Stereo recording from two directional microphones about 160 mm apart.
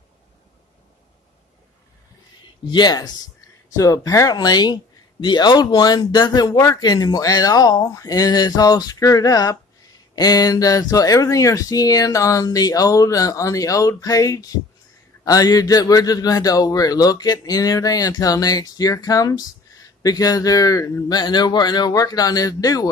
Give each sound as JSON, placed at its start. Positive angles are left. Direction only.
{"t": 2.4, "sound": "speech", "side_deg": 25}